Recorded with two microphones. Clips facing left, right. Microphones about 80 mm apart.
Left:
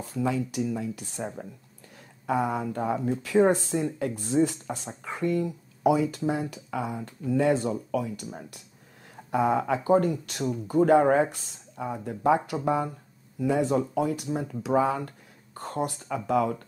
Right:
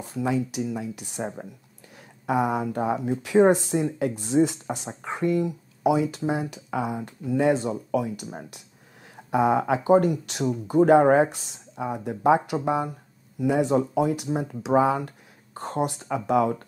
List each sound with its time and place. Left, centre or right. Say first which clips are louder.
0.0 s speech: right 2 dB; right
2.3 s speech: right 3 dB; centre
9.4 s speech: right 3 dB; right